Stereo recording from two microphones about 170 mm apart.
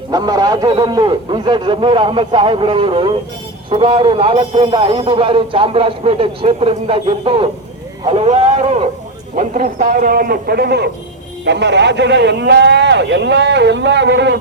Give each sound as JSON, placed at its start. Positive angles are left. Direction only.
{"t": 0.1, "sound": "a man's voice", "side_deg": -20}
{"t": 9.3, "sound": "a man's voice", "side_deg": -50}
{"t": 11.4, "sound": "a man's voice", "side_deg": -90}